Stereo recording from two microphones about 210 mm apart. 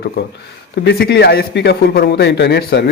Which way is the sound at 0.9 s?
50° left (ahead or behind).